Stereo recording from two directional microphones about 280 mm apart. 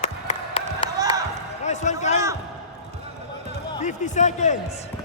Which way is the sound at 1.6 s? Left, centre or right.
Left.